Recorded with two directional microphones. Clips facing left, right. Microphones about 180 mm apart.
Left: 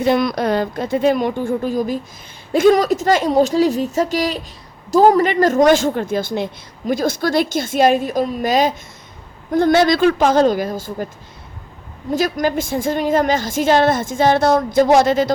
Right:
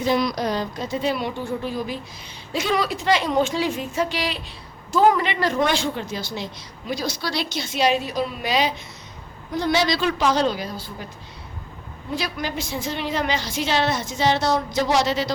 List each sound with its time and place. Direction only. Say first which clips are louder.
0.0 s speech: left 5 dB; 55° left (ahead or behind)
12.1 s speech: left 9 dB; 45° left (ahead or behind)